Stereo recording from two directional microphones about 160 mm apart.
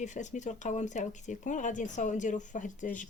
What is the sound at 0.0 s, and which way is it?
A woman's voice, 50° left (ahead or behind).